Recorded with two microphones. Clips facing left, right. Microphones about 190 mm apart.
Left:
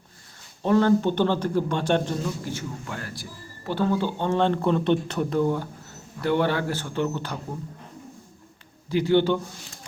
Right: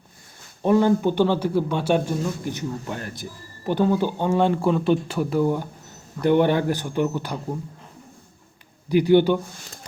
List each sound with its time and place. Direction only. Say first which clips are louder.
0.6 s a man's voice: right 2 dB; 15° right (ahead or behind)
8.9 s a man's voice: right 4 dB; 15° right (ahead or behind)